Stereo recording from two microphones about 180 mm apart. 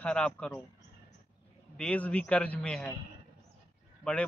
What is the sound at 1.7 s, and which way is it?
A man's voice, 5° left (ahead or behind).